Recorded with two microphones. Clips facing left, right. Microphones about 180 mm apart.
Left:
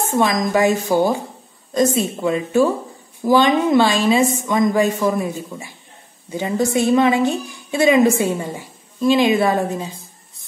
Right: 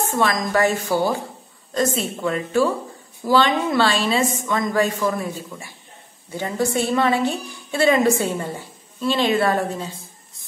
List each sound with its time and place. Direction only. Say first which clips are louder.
0.1 s a woman's voice: left 5 dB; 15° left (ahead or behind)